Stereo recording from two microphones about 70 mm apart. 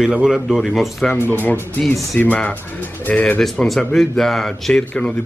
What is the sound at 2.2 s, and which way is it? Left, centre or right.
Speech, left.